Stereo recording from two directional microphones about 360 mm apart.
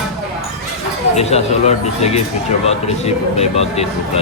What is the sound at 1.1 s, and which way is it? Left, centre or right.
Speech, centre.